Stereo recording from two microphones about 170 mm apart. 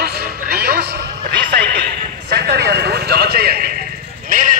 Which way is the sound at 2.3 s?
70° right (ahead or behind).